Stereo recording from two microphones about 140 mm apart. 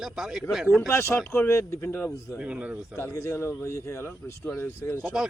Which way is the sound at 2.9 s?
20° left (ahead or behind).